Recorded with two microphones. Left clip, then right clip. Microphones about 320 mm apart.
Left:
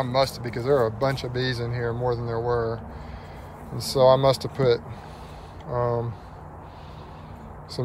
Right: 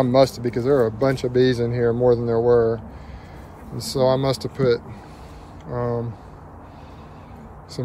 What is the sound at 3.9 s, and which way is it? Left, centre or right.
Speech, centre.